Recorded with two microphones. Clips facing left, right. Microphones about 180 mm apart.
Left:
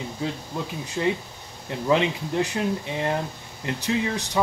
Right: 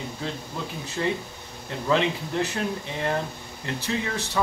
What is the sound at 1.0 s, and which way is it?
Speech, 20° left (ahead or behind).